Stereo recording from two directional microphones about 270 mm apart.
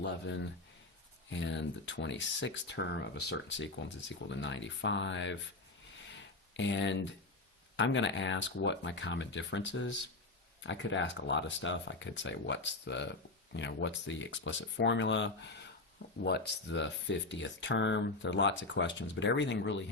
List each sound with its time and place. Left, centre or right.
0.0 s speech: left
6.6 s speech: left